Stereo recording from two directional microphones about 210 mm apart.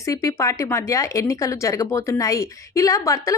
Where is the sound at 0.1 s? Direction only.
15° left (ahead or behind).